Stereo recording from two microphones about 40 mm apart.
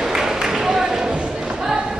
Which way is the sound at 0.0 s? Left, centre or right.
Centre.